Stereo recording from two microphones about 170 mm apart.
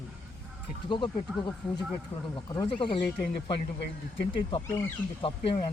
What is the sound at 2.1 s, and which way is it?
Speech, 35° left (ahead or behind).